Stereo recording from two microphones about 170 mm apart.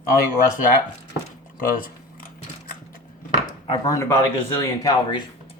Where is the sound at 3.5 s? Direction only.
25° left (ahead or behind).